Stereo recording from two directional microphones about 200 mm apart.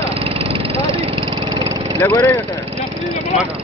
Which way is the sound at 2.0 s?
15° left (ahead or behind).